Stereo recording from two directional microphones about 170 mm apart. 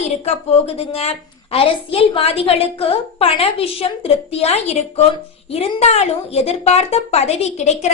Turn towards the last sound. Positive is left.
turn(degrees=40)  # may be behind; listen again after turning